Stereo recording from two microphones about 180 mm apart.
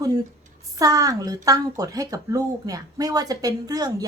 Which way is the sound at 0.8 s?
20° right (ahead or behind).